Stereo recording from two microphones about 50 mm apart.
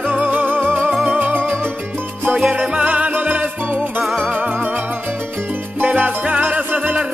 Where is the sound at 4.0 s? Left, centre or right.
Centre.